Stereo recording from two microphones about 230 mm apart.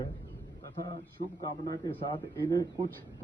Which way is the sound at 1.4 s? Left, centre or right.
Centre.